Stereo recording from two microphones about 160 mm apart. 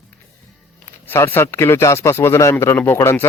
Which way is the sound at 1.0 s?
15° left (ahead or behind).